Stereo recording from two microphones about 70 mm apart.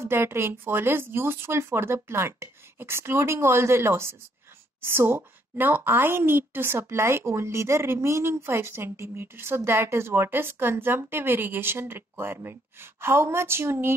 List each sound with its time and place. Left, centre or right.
0.0 s a woman's voice: right